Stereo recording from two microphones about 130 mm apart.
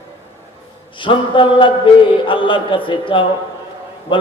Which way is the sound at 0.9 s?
40° left (ahead or behind).